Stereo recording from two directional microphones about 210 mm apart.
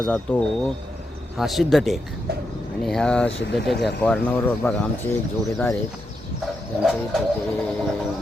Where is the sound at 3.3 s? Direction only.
55° left (ahead or behind).